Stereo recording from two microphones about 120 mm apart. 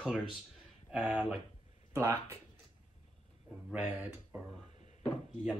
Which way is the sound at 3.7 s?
10° right (ahead or behind).